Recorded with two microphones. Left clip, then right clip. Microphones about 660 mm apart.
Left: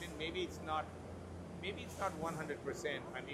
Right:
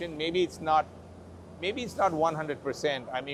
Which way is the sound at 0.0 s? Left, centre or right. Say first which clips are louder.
Right 13 dB; right.